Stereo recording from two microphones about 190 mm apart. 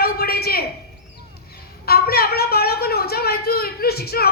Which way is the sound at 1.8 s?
55° left (ahead or behind).